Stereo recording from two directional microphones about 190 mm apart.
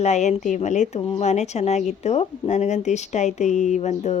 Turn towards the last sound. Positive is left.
turn(degrees=35)  # may be behind; listen again after turning